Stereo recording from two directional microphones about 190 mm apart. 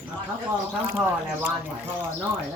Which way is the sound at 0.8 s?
10° right (ahead or behind).